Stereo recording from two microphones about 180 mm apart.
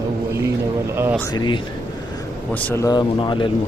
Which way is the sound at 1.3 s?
25° left (ahead or behind).